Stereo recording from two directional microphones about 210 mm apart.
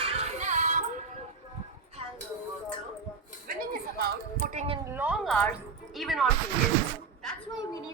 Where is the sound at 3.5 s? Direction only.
45° right (ahead or behind).